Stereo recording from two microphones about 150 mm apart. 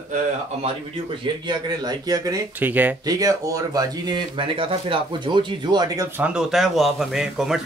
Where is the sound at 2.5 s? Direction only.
10° right (ahead or behind).